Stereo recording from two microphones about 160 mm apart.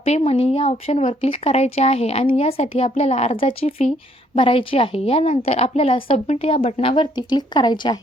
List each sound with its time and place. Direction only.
0.0 s speech: 40° left (ahead or behind)